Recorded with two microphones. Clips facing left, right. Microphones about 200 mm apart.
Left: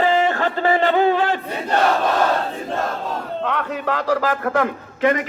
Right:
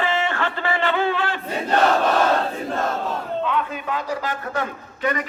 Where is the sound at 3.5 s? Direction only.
75° left (ahead or behind).